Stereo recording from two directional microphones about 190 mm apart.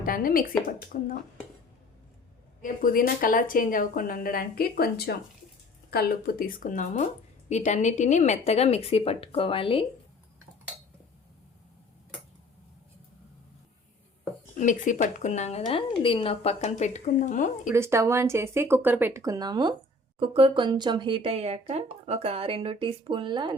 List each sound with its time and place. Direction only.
0.0 s speech: 50° left (ahead or behind)
2.6 s speech: 45° left (ahead or behind); by 9.8 s 30° left (ahead or behind)
14.6 s speech: 40° left (ahead or behind)
17.7 s speech: 15° right (ahead or behind)